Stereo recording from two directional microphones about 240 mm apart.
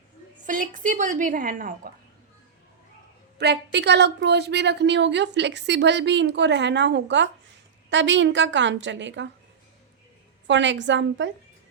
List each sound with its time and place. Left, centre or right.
0.4 s a woman's voice: right
3.3 s a woman's voice: right
10.4 s a woman's voice: right